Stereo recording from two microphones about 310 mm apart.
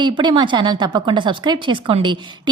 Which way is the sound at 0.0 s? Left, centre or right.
Centre.